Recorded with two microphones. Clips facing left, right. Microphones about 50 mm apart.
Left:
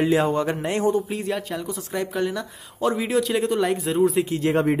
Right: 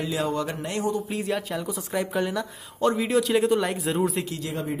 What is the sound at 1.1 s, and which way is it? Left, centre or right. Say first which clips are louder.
Speech: left 1 dB; centre.